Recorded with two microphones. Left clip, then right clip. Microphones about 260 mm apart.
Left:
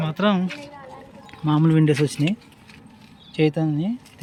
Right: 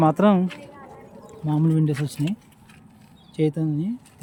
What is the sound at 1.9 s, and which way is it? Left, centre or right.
Speech, centre.